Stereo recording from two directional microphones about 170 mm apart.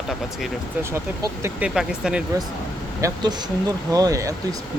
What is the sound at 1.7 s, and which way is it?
Speech, 5° right (ahead or behind).